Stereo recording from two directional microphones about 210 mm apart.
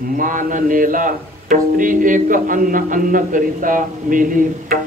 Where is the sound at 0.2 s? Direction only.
40° right (ahead or behind).